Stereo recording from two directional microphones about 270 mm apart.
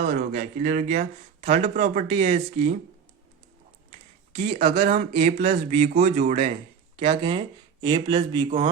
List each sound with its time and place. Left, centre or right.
0.0 s speech: right
4.4 s speech: right